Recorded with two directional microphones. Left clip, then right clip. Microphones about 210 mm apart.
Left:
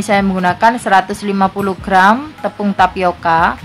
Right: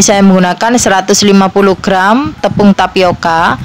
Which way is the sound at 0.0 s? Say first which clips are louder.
Right 6 dB; 45° right (ahead or behind).